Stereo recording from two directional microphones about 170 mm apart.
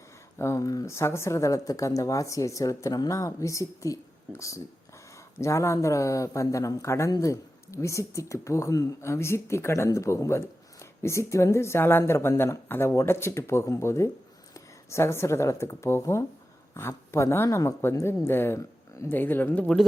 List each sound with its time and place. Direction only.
0.3 s speech: 15° left (ahead or behind)